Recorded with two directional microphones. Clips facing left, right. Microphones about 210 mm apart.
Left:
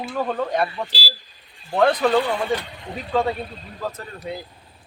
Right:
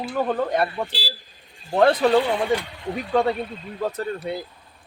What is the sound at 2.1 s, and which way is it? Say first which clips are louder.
Speech: right 1 dB; 15° right (ahead or behind).